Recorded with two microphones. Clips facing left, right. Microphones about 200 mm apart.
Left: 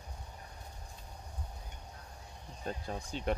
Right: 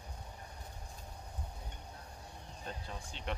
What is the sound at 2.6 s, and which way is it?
Speech, 40° left (ahead or behind).